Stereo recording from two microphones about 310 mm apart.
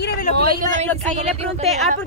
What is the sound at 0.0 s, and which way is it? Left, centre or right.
Vehicle, left.